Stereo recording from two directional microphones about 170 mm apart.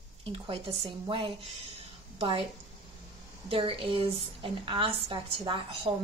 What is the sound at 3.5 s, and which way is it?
A woman's voice, 30° right (ahead or behind).